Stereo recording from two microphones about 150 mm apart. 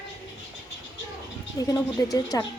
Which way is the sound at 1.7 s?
25° left (ahead or behind).